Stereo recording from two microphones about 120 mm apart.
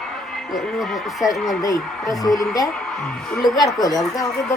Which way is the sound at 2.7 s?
5° left (ahead or behind).